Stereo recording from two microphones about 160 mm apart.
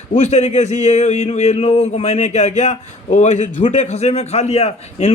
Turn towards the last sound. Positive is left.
turn(degrees=40)  # may be behind; listen again after turning